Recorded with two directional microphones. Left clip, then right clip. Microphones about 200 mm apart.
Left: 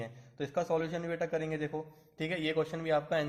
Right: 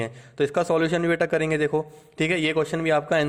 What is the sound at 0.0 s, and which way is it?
A man's voice, 40° right (ahead or behind).